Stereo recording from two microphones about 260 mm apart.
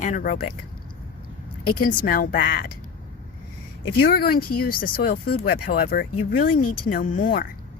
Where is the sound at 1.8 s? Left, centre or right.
Left.